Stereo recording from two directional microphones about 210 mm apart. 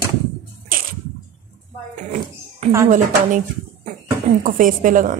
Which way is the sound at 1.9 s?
35° right (ahead or behind).